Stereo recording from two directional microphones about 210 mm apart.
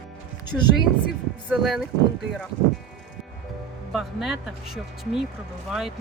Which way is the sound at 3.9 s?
Centre (ahead or behind).